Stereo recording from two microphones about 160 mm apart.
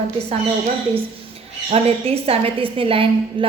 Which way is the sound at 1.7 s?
40° right (ahead or behind).